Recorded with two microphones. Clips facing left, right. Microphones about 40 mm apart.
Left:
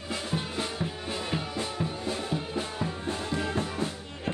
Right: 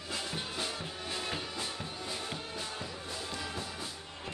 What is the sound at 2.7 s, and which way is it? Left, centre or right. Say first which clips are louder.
Music: left 8 dB; left.